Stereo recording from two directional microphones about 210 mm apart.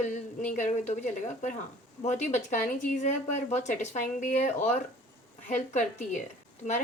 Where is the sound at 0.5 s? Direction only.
35° left (ahead or behind).